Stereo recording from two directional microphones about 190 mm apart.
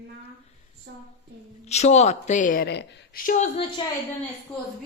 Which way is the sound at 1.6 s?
35° left (ahead or behind).